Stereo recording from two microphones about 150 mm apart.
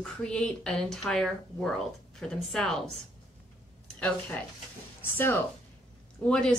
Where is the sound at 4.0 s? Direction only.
10° left (ahead or behind).